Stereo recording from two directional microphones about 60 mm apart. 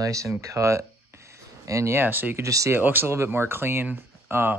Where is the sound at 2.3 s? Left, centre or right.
Right.